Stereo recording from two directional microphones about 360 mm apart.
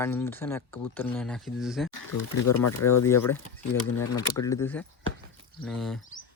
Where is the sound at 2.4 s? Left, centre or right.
Left.